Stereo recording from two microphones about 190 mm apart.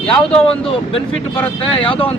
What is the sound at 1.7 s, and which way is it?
Speech, 25° left (ahead or behind).